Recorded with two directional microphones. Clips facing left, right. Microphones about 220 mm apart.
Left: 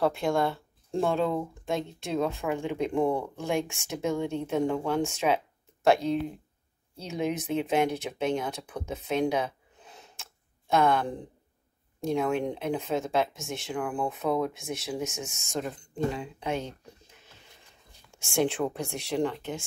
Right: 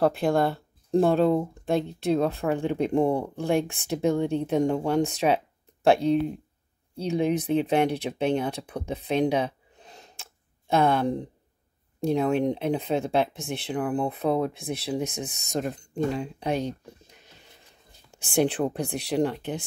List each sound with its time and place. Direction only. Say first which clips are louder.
0.0 s speech: right 3 dB; 35° right (ahead or behind)
18.1 s speech: right 3 dB; 35° right (ahead or behind)